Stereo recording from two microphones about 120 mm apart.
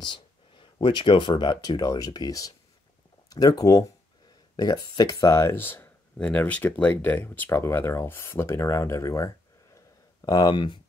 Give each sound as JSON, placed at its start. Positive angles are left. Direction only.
{"t": 0.0, "sound": "speech", "side_deg": 40}
{"t": 10.2, "sound": "speech", "side_deg": 35}